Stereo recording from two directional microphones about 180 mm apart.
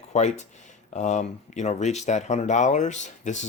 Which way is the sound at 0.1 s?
40° left (ahead or behind).